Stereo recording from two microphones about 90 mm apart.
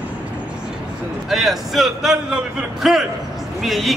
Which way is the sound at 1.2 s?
Centre (ahead or behind).